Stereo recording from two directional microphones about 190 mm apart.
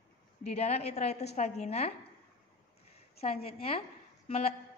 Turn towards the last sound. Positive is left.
turn(degrees=30)  # may be behind; listen again after turning